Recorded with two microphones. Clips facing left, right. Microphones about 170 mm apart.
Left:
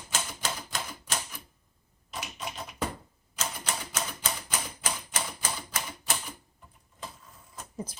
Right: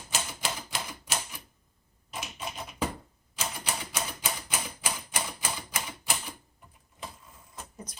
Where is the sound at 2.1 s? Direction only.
5° right (ahead or behind).